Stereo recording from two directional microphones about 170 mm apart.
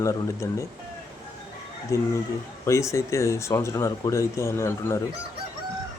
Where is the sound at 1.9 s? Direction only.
20° left (ahead or behind).